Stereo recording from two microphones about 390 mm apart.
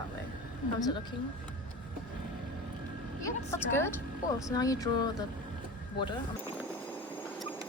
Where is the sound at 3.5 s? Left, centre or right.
Centre.